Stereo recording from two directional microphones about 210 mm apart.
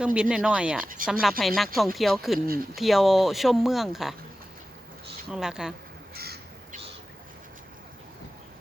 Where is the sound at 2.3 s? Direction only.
45° right (ahead or behind).